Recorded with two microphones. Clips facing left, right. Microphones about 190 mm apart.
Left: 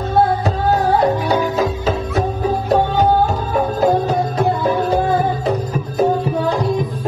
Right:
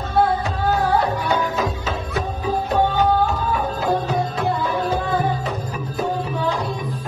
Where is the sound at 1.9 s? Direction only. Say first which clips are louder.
Left 6 dB; 40° left (ahead or behind).